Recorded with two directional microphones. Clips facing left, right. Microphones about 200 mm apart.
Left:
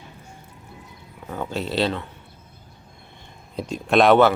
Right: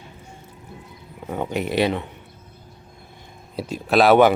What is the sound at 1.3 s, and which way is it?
Speech, 20° right (ahead or behind).